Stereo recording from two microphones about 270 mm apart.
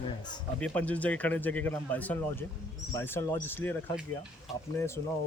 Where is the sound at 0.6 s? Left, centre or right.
Centre.